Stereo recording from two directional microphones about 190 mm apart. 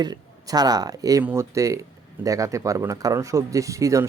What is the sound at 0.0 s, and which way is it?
Speech, 20° right (ahead or behind).